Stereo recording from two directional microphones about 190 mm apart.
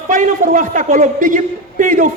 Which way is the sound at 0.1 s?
40° right (ahead or behind).